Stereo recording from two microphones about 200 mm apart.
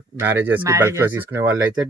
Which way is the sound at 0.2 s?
10° right (ahead or behind).